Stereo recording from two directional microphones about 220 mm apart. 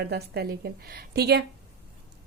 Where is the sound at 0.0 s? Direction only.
45° right (ahead or behind).